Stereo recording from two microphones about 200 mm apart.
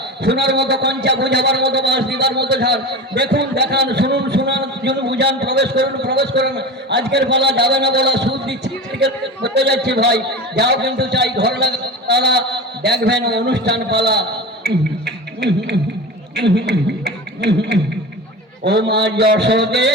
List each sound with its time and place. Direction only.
0.2 s a man's voice: 55° right (ahead or behind)
15.0 s music: 60° right (ahead or behind)
16.3 s a man's voice: 60° right (ahead or behind)